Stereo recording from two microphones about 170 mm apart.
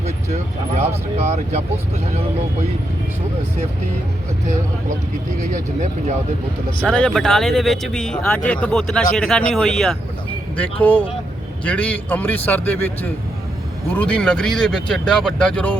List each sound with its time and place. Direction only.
0.8 s speech: 40° right (ahead or behind)
5.4 s speech: 50° right (ahead or behind)
6.8 s speech: 5° left (ahead or behind)
11.6 s a man's voice: 10° left (ahead or behind)